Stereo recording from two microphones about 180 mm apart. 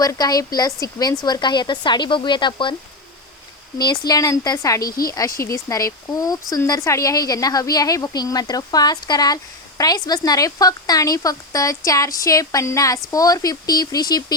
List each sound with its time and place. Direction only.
0.0 s speech: 20° left (ahead or behind)
3.8 s speech: 20° left (ahead or behind)
4.8 s speech: 55° left (ahead or behind)
5.1 s speech: 20° left (ahead or behind)